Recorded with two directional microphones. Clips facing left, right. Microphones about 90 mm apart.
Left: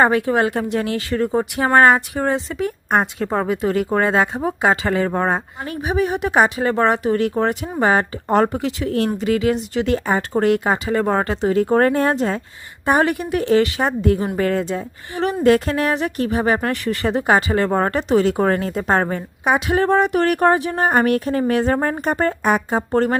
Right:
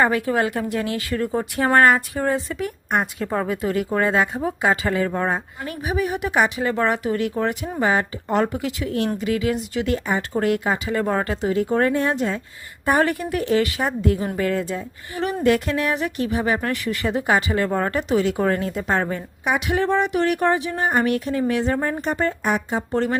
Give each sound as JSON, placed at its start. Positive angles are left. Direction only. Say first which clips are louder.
{"t": 0.3, "sound": "a woman's voice", "louder": "left 3 dB", "side_deg": 30}
{"t": 11.5, "sound": "a woman's voice", "louder": "left 4 dB", "side_deg": 45}
{"t": 12.8, "sound": "a woman's voice", "louder": "left 2 dB", "side_deg": 20}